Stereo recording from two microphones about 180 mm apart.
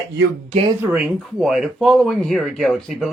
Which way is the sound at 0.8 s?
10° right (ahead or behind).